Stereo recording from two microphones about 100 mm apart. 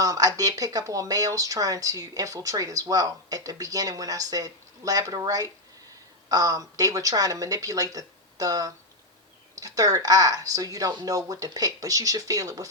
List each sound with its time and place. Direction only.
0.0 s speech: 35° right (ahead or behind)